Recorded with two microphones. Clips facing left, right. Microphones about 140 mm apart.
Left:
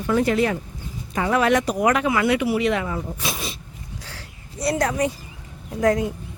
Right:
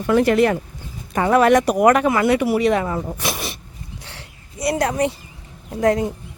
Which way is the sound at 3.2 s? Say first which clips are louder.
Right 3 dB; 70° right (ahead or behind).